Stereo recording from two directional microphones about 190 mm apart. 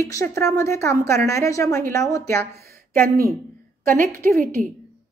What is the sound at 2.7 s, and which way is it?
A woman's voice, 50° right (ahead or behind).